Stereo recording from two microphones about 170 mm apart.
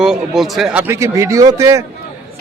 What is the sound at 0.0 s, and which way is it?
A man's voice, centre (ahead or behind).